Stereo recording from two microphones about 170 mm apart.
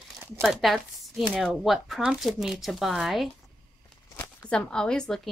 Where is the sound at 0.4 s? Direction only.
Centre (ahead or behind).